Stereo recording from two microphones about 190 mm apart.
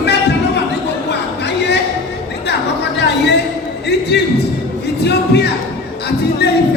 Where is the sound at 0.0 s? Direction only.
60° left (ahead or behind).